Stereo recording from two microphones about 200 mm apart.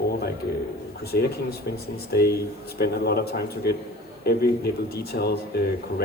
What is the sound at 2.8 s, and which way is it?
Speech, 55° left (ahead or behind).